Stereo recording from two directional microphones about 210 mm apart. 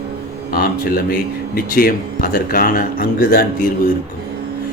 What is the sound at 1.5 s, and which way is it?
Speech, 45° left (ahead or behind).